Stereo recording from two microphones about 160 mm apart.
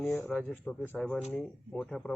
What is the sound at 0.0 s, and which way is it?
A man's voice, 10° left (ahead or behind).